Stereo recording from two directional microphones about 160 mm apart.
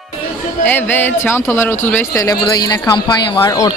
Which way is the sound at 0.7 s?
10° left (ahead or behind).